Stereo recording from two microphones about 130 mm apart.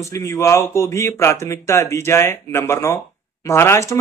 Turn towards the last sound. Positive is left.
turn(degrees=20)  # may be behind; listen again after turning